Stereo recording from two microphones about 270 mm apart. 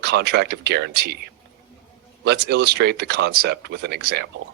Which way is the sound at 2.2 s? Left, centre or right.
Right.